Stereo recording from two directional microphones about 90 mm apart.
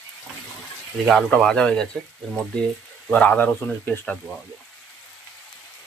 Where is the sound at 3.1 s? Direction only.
15° left (ahead or behind).